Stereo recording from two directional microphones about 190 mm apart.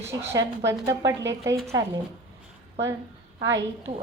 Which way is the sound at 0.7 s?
15° right (ahead or behind).